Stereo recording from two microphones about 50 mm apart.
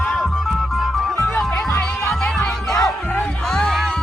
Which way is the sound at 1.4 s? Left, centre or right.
Centre.